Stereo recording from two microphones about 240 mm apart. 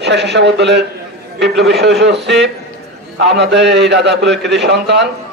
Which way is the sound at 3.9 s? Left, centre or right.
Right.